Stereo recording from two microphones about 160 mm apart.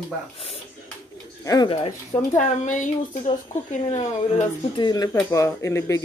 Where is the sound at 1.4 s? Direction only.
25° left (ahead or behind).